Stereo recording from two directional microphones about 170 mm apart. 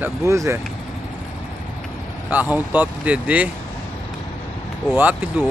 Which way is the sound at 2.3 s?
10° right (ahead or behind).